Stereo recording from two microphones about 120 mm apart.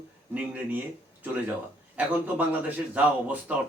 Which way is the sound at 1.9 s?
10° right (ahead or behind).